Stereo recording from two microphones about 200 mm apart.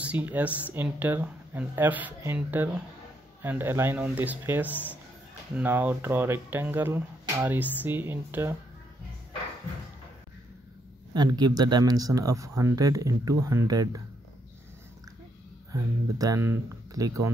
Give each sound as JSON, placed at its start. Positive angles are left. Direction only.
{"t": 0.0, "sound": "speech", "side_deg": -10}
{"t": 11.1, "sound": "speech", "side_deg": -20}
{"t": 15.7, "sound": "speech", "side_deg": -15}